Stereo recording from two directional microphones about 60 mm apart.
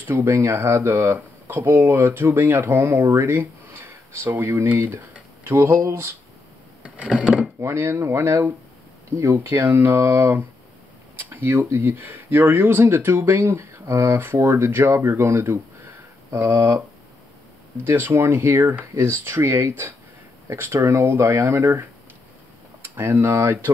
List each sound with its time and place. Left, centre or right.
0.0 s speech: right
6.8 s a sound: right
7.6 s speech: right
11.1 s speech: right
17.8 s speech: right
22.8 s speech: right